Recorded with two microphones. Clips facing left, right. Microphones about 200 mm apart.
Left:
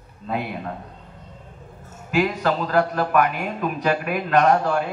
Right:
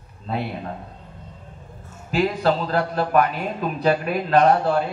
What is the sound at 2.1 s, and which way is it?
A man's voice, 30° right (ahead or behind).